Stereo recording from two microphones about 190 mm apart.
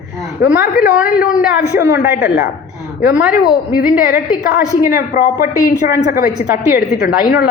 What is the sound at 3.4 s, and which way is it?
Speech, 50° left (ahead or behind).